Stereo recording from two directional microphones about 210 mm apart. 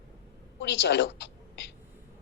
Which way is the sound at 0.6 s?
55° left (ahead or behind).